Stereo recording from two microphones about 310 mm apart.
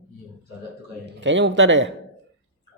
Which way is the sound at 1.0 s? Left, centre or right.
Right.